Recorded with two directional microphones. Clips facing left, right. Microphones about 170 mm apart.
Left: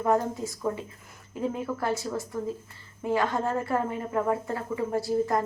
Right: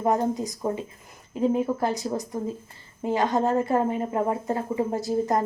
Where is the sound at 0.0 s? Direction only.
15° right (ahead or behind).